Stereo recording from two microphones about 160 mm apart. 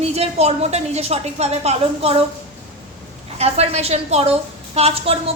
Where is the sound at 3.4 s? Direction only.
40° right (ahead or behind).